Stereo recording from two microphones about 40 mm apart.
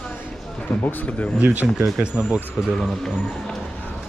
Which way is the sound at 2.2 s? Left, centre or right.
Right.